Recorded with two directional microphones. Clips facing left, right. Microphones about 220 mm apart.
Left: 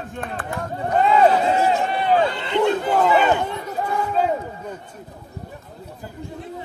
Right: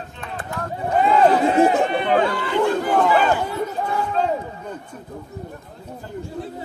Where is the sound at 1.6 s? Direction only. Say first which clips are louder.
Right 4 dB; 55° right (ahead or behind).